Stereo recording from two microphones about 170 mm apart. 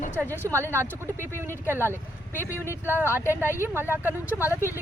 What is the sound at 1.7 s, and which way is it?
Speech, 15° right (ahead or behind).